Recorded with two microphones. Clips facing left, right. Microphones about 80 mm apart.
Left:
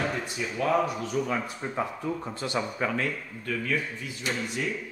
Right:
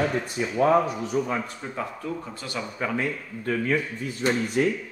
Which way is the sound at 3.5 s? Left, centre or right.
Right.